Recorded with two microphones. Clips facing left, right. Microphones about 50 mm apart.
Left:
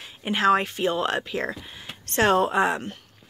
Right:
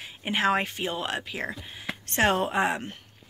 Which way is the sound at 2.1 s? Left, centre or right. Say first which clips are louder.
Left 4 dB; centre.